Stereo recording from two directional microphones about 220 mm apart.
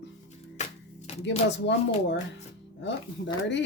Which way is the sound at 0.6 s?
30° left (ahead or behind).